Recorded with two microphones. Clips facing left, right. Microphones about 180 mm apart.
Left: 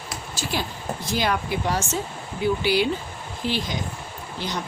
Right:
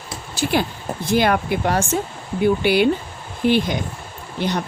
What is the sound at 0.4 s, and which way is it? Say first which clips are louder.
Speech: right 9 dB; 60° right (ahead or behind).